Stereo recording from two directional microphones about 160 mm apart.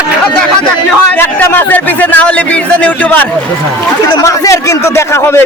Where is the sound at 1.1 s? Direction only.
10° left (ahead or behind).